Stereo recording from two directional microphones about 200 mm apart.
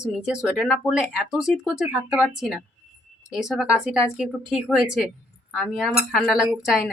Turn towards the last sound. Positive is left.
turn(degrees=-5)  # may be behind; listen again after turning